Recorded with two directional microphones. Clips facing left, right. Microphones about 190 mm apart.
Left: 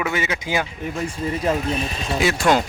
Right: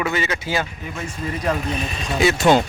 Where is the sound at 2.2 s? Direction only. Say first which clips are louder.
Right 4 dB; centre (ahead or behind).